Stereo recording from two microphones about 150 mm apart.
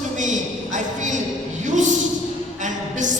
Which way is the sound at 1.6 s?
55° right (ahead or behind).